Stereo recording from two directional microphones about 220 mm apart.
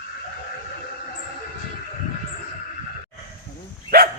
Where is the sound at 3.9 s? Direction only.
45° right (ahead or behind).